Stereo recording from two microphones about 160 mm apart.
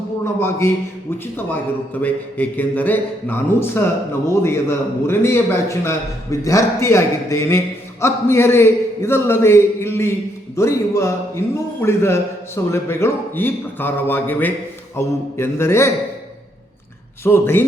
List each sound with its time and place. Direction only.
0.3 s a man's voice: 15° left (ahead or behind)
1.9 s a man's voice: 10° left (ahead or behind)
17.2 s a man's voice: 15° left (ahead or behind)